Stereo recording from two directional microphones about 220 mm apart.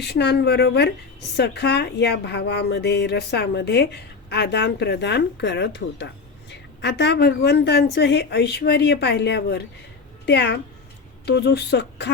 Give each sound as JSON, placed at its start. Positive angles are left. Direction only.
{"t": 0.0, "sound": "speech", "side_deg": 50}